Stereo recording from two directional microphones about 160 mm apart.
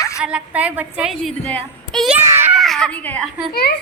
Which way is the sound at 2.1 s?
10° right (ahead or behind).